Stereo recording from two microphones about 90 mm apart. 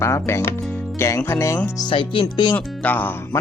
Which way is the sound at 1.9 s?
70° left (ahead or behind).